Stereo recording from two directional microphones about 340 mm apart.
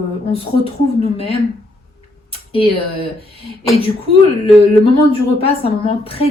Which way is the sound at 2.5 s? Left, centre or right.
Centre.